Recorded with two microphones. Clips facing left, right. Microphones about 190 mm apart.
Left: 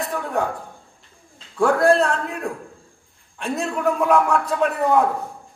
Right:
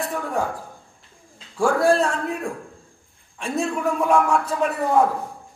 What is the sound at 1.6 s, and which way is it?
Speech, 60° left (ahead or behind).